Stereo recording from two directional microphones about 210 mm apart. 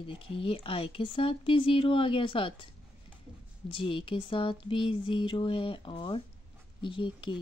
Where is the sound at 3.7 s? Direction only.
25° left (ahead or behind).